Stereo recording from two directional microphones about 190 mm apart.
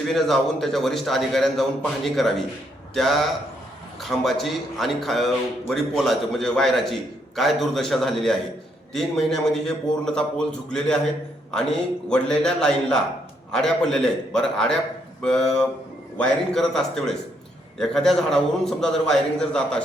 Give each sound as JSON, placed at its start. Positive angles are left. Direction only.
{"t": 0.1, "sound": "a man's voice", "side_deg": 0}
{"t": 12.0, "sound": "a man's voice", "side_deg": 5}